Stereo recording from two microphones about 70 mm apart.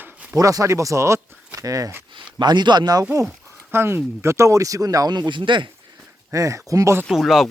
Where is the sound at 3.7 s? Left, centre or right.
Right.